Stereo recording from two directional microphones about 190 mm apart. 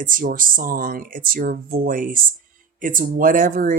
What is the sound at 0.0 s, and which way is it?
Speech, 45° right (ahead or behind).